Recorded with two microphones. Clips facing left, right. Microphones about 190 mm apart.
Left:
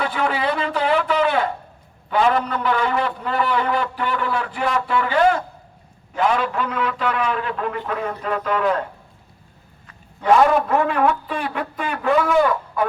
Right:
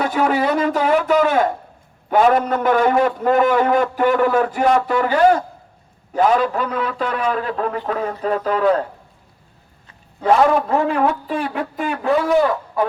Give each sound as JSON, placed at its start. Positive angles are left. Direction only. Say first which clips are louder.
{"t": 0.0, "sound": "a sound", "louder": "right 4 dB", "side_deg": -40}
{"t": 2.0, "sound": "a man's voice", "louder": "right 4 dB", "side_deg": -50}
{"t": 10.7, "sound": "a man's voice", "louder": "right 1 dB", "side_deg": -35}